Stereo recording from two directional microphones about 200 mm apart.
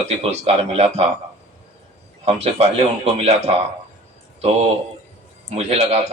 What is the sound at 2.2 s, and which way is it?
A man's voice, 30° right (ahead or behind).